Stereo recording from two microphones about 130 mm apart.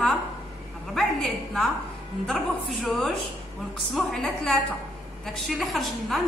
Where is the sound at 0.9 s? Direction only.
5° left (ahead or behind).